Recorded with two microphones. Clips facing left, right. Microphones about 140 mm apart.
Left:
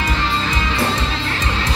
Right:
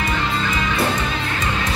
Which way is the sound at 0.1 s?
30° left (ahead or behind).